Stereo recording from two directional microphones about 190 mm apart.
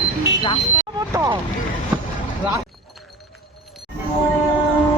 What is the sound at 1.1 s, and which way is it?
Vehicle, 15° right (ahead or behind).